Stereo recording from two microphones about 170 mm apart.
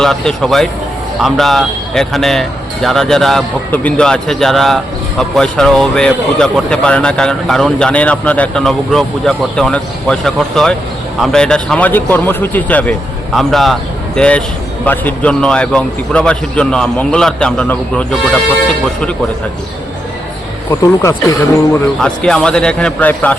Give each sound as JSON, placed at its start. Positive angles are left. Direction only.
{"t": 0.0, "sound": "a man's voice", "side_deg": 5}
{"t": 20.7, "sound": "speech", "side_deg": 15}
{"t": 22.0, "sound": "speech", "side_deg": 5}